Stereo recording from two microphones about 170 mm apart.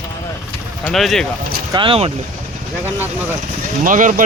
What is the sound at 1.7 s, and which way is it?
Speech, 30° right (ahead or behind).